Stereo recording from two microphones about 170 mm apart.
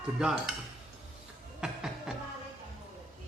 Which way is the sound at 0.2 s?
5° right (ahead or behind).